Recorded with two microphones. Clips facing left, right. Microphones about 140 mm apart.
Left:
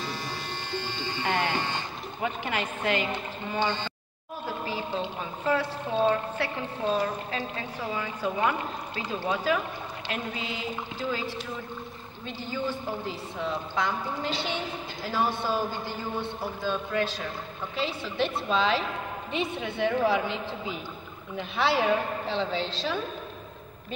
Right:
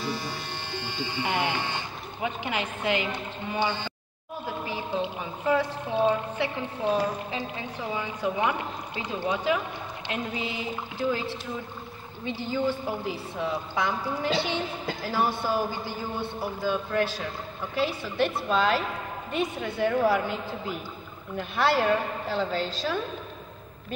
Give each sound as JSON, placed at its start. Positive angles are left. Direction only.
{"t": 0.0, "sound": "music", "side_deg": -10}
{"t": 3.5, "sound": "a woman's voice", "side_deg": -10}
{"t": 12.4, "sound": "a woman's voice", "side_deg": -10}
{"t": 16.6, "sound": "a woman's voice", "side_deg": -10}
{"t": 21.4, "sound": "a woman's voice", "side_deg": 0}